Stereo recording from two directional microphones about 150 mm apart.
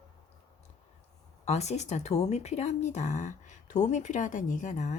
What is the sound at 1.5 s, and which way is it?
Speech, 45° left (ahead or behind).